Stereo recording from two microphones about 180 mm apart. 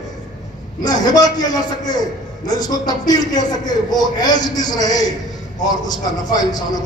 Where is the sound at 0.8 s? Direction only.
20° left (ahead or behind).